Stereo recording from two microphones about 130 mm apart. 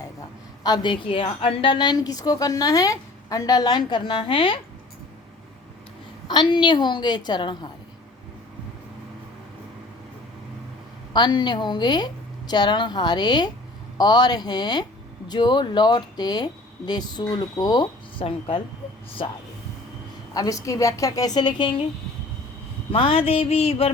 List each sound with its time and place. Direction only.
0.6 s a woman's voice: 35° left (ahead or behind)
6.2 s a woman's voice: 35° left (ahead or behind)
11.1 s a woman's voice: 35° left (ahead or behind)
20.3 s a woman's voice: 25° left (ahead or behind)
22.9 s mantra: 45° left (ahead or behind)